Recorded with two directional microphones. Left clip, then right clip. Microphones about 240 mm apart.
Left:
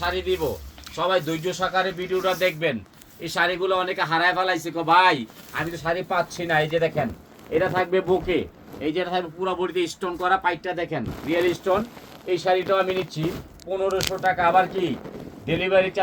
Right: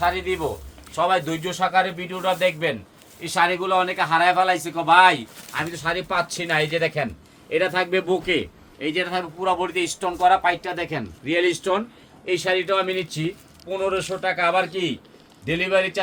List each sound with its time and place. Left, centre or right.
0.1 s speech: right
3.2 s a man's voice: centre
5.7 s speech: right
7.8 s a man's voice: right
15.4 s a man's voice: right